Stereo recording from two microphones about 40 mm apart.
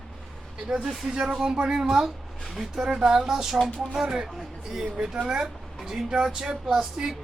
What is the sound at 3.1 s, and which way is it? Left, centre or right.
Speech, centre.